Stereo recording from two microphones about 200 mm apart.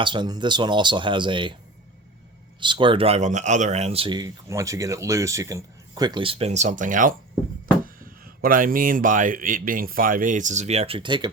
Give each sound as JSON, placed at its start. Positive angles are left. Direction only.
{"t": 0.0, "sound": "speech", "side_deg": -25}
{"t": 2.6, "sound": "speech", "side_deg": -25}
{"t": 8.2, "sound": "speech", "side_deg": -45}